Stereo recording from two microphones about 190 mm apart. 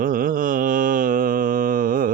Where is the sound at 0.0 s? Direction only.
45° right (ahead or behind).